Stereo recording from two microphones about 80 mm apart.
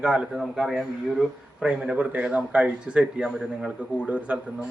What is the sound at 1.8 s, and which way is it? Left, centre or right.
A man's voice, centre.